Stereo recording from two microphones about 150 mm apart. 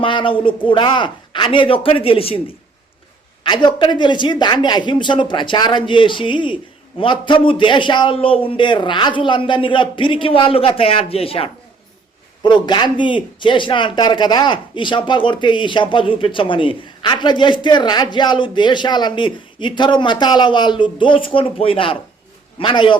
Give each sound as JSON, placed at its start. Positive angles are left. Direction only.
{"t": 0.0, "sound": "speech", "side_deg": 35}
{"t": 3.4, "sound": "speech", "side_deg": 30}